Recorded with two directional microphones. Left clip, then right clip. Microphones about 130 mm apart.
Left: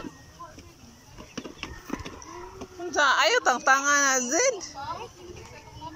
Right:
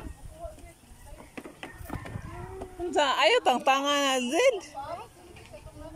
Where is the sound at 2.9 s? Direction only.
35° right (ahead or behind).